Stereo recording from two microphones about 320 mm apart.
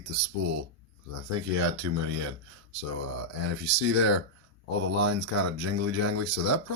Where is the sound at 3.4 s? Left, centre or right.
Right.